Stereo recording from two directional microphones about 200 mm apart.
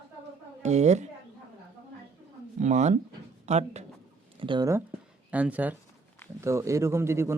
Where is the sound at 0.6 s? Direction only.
35° right (ahead or behind).